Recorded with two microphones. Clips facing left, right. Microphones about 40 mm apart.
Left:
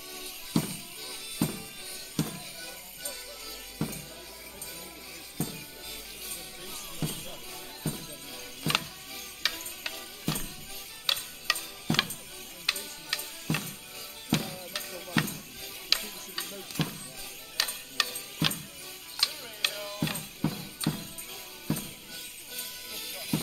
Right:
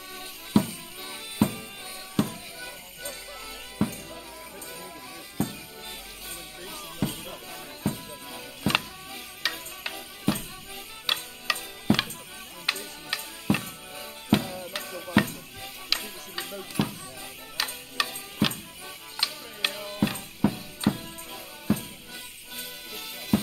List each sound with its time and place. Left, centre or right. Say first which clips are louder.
0.5 s music: right 6 dB; right
5.4 s music: right 6 dB; right
6.7 s music: right 5 dB; centre
7.8 s music: right 6 dB; right; by 11.2 s centre
11.5 s a sound: right 2 dB; centre
11.9 s music: right 4 dB; right
15.9 s music: right 1 dB; centre
18.4 s music: right 4 dB; centre